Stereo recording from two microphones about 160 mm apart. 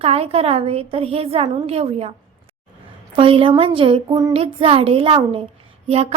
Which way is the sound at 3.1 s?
35° right (ahead or behind).